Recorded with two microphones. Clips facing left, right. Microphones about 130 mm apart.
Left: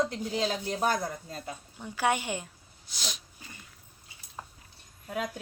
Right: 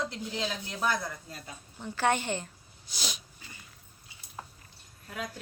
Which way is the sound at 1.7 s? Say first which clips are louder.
Even; 10° left (ahead or behind).